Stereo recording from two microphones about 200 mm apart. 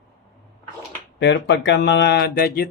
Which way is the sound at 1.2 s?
60° left (ahead or behind).